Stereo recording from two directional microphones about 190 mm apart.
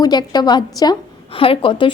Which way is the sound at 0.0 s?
20° left (ahead or behind).